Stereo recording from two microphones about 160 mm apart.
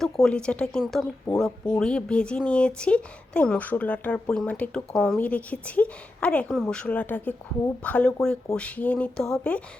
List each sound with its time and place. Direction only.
0.0 s speech: 5° left (ahead or behind)